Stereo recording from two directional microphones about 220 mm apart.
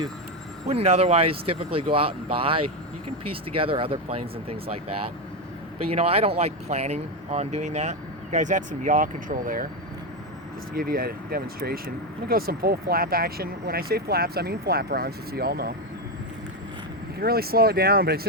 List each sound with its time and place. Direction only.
0.7 s speech: 30° right (ahead or behind)
10.8 s speech: 40° right (ahead or behind)
17.2 s speech: 45° right (ahead or behind)